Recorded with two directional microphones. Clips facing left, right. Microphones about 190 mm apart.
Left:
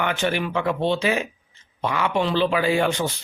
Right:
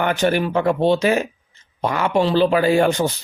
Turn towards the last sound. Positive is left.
turn(degrees=-45)  # may be behind; listen again after turning